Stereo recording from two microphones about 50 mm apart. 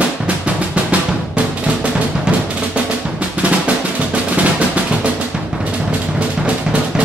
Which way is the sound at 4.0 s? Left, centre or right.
Right.